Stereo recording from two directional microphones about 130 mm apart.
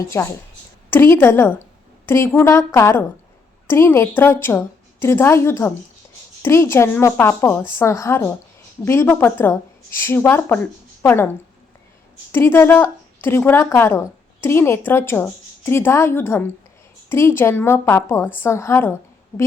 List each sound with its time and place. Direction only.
0.0 s a woman's voice: 20° left (ahead or behind)
12.3 s a woman's voice: 15° left (ahead or behind)